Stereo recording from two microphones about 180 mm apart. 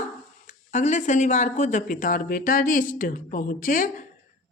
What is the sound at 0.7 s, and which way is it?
Speech, 40° left (ahead or behind).